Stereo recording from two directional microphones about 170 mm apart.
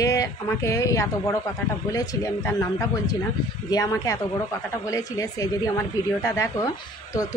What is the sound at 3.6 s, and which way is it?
A woman's voice, 20° left (ahead or behind).